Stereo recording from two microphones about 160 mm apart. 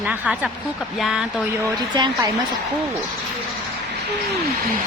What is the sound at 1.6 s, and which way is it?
Speech, 20° right (ahead or behind).